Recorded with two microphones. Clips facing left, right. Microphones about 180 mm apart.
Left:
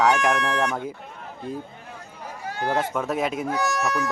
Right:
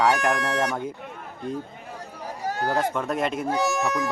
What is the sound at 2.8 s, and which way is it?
Speech, 5° left (ahead or behind).